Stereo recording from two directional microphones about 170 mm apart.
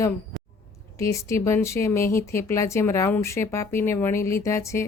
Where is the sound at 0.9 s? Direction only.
20° left (ahead or behind).